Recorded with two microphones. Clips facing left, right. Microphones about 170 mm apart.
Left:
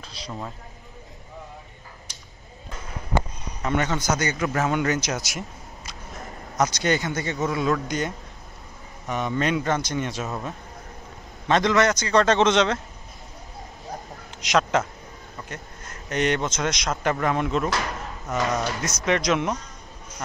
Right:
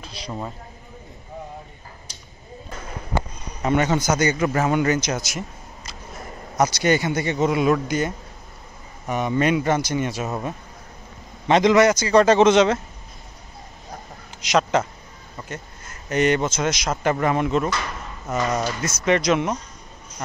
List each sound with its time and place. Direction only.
3.6 s a man's voice: 10° right (ahead or behind)
4.6 s speech: centre (ahead or behind)
6.5 s a man's voice: 5° right (ahead or behind)
9.0 s a man's voice: 10° right (ahead or behind)
11.4 s a man's voice: 20° right (ahead or behind)
14.4 s a man's voice: centre (ahead or behind)